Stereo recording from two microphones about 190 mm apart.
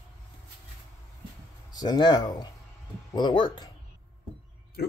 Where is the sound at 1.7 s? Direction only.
20° left (ahead or behind).